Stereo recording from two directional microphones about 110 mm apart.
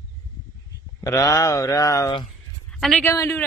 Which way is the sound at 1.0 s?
30° left (ahead or behind).